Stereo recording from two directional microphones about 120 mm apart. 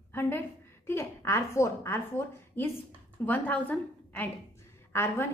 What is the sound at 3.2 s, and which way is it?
A woman's voice, 15° left (ahead or behind).